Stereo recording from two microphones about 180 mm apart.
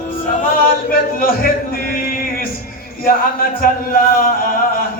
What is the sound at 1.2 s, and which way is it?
Music, 55° left (ahead or behind).